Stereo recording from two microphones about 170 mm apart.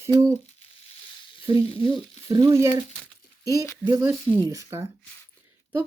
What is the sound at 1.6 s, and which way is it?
Speech, 35° left (ahead or behind).